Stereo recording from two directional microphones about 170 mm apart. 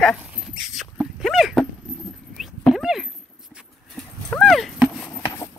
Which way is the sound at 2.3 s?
Centre (ahead or behind).